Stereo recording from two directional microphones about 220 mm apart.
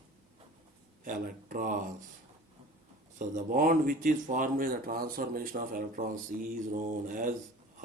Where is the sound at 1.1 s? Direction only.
40° right (ahead or behind).